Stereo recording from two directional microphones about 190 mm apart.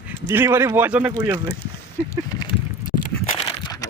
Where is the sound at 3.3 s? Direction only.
30° left (ahead or behind).